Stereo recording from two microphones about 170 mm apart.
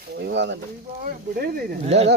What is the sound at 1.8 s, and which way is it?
Speech, 35° right (ahead or behind).